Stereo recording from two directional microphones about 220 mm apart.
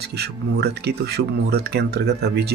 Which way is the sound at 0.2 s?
50° right (ahead or behind).